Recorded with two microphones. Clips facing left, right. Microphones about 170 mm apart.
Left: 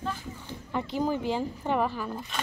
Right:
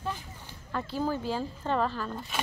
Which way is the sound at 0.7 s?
15° left (ahead or behind).